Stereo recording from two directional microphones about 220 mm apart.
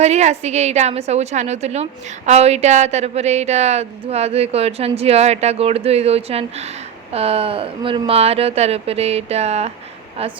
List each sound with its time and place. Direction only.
0.0 s a woman's voice: 30° right (ahead or behind)